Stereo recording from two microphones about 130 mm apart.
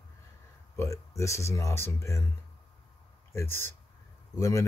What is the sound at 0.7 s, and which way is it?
Speech, 25° left (ahead or behind).